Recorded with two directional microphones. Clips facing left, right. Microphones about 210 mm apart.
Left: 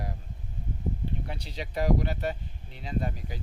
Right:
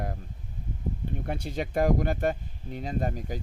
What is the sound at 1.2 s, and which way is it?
Speech, 50° right (ahead or behind).